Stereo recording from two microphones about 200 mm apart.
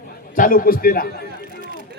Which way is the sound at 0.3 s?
45° left (ahead or behind).